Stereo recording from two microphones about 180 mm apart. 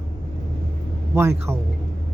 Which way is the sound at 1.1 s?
15° right (ahead or behind).